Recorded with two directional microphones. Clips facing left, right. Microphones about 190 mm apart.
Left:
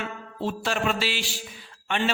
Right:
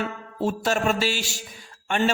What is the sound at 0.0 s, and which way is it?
A man's voice, 45° right (ahead or behind).